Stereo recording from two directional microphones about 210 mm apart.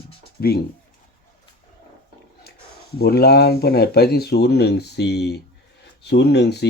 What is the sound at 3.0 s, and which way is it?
Speech, 50° left (ahead or behind).